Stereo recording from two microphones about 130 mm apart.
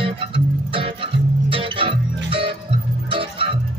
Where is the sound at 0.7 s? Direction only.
45° right (ahead or behind).